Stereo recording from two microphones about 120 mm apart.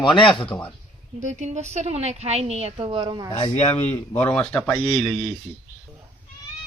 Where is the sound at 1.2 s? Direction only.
75° right (ahead or behind); by 2.7 s 60° right (ahead or behind).